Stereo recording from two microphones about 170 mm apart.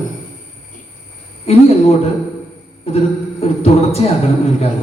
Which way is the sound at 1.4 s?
40° left (ahead or behind).